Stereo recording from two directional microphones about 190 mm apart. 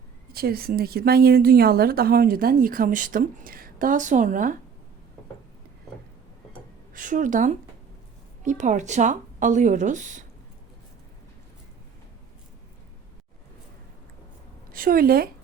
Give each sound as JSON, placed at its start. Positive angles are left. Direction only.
{"t": 0.3, "sound": "speech", "side_deg": -50}
{"t": 6.9, "sound": "speech", "side_deg": -45}
{"t": 14.7, "sound": "a woman's voice", "side_deg": -50}